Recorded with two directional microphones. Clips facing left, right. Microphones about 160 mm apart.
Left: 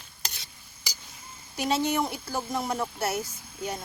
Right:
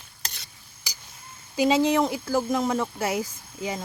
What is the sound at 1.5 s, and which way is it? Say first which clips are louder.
Speech: right 6 dB; 90° right.